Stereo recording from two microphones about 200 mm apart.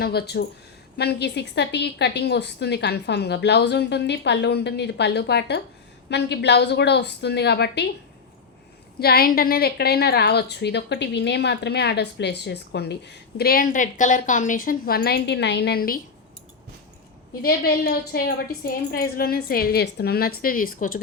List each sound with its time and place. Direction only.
0.0 s a woman's voice: 50° left (ahead or behind)
9.0 s a woman's voice: 50° left (ahead or behind)
17.4 s a woman's voice: 50° left (ahead or behind)